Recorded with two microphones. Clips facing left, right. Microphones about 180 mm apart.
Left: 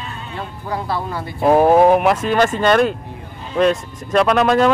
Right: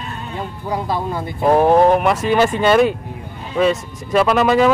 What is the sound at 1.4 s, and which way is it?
Speech, 5° left (ahead or behind).